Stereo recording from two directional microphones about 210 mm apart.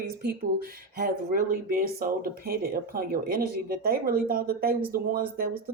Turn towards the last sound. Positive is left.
turn(degrees=-45)  # may be behind; listen again after turning